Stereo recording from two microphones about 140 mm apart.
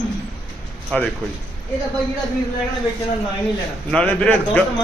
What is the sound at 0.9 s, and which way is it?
Speech, 10° left (ahead or behind).